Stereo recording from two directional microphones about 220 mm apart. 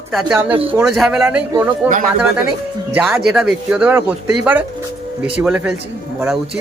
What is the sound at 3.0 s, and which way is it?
A man's voice, 5° right (ahead or behind).